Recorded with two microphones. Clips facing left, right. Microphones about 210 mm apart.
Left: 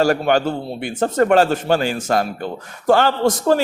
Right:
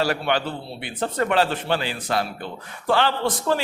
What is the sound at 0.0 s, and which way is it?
A man's voice, 45° left (ahead or behind).